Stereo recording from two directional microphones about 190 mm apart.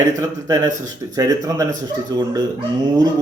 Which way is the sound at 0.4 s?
20° right (ahead or behind).